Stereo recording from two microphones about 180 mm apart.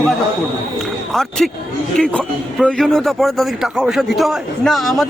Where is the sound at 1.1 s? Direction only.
Centre (ahead or behind).